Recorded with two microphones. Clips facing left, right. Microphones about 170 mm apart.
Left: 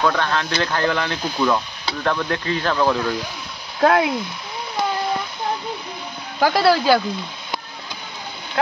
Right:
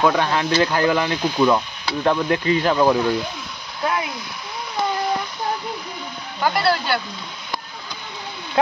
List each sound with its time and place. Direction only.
0.0 s speech: 15° right (ahead or behind)
3.8 s speech: 90° left
6.4 s speech: 90° left